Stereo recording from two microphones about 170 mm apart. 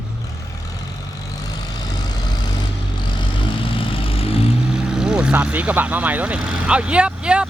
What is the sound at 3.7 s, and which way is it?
Vehicle, 30° left (ahead or behind).